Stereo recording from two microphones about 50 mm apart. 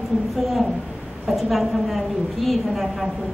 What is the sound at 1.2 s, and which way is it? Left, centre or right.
A woman's voice, centre.